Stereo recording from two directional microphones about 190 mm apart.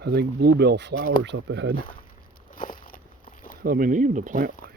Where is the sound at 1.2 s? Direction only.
75° right (ahead or behind).